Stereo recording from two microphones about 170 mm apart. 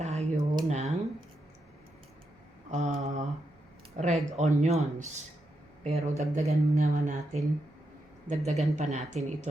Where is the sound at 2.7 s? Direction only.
45° right (ahead or behind).